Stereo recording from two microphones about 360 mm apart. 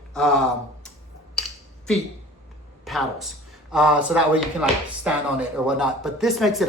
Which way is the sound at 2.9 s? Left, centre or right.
Centre.